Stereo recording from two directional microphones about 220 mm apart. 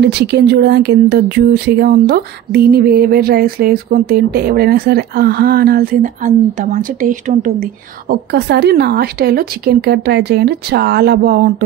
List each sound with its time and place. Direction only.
0.0 s speech: 45° right (ahead or behind)